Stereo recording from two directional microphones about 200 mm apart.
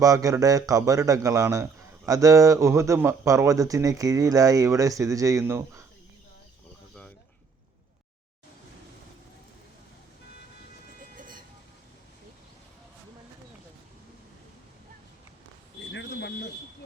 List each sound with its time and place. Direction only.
0.0 s a man's voice: 15° right (ahead or behind)
11.2 s vehicle: 40° right (ahead or behind)
15.9 s a sound: 60° left (ahead or behind)